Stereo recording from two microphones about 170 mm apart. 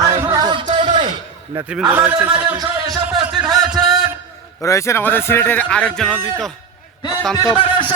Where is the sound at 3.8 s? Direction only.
Centre (ahead or behind).